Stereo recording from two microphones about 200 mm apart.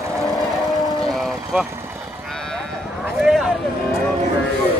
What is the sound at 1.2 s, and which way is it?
Vehicle, 5° right (ahead or behind).